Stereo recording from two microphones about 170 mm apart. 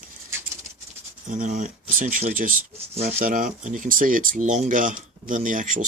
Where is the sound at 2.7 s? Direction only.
35° right (ahead or behind).